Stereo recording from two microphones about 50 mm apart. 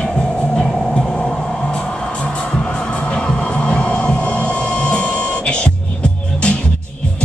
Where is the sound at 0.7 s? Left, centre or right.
Centre; by 6.7 s left.